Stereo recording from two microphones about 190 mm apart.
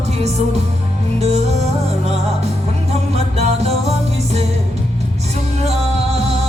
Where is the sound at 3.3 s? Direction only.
35° right (ahead or behind).